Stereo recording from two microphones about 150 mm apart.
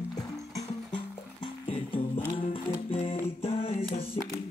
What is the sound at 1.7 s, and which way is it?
Music, 40° left (ahead or behind).